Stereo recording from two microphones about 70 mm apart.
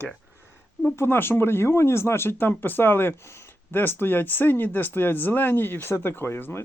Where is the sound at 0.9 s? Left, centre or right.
Left.